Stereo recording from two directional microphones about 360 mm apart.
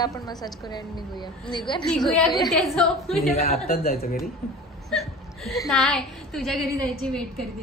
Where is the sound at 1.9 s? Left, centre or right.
Centre.